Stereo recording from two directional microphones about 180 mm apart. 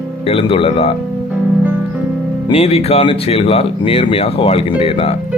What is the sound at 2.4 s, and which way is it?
Speech, 35° left (ahead or behind).